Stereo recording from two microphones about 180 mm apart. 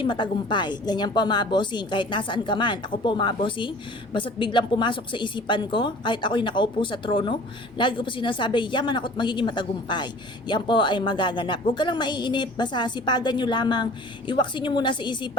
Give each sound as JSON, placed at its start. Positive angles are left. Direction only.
{"t": 0.0, "sound": "a woman's voice", "side_deg": 25}